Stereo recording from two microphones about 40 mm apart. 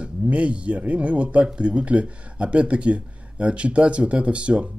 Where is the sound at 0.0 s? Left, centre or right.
Right.